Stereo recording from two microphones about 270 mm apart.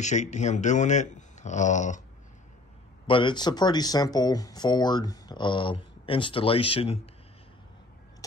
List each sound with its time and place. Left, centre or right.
0.0 s speech: left
3.1 s speech: centre